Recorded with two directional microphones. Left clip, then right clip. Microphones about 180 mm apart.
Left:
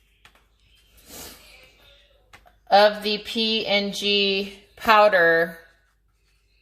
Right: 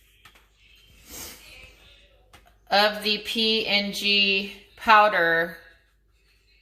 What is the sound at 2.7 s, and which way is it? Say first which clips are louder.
Speech: left 4 dB; 45° left (ahead or behind).